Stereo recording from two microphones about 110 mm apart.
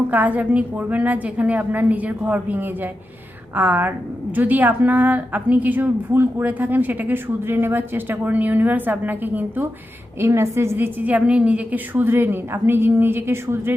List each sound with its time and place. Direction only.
0.1 s a woman's voice: 15° right (ahead or behind)